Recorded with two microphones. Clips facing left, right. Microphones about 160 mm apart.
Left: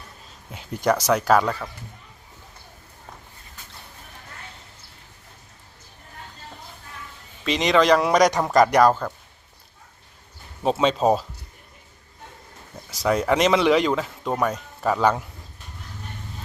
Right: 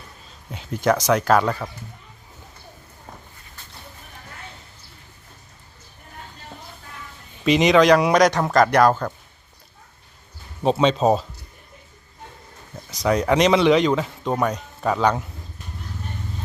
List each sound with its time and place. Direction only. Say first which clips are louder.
0.5 s speech: right 2 dB; 10° left (ahead or behind)
1.5 s speech: right 2 dB; 10° right (ahead or behind)
7.4 s speech: right 4 dB; 5° right (ahead or behind)
10.6 s speech: right 2 dB; 5° left (ahead or behind)
12.9 s speech: right 1 dB; 5° left (ahead or behind)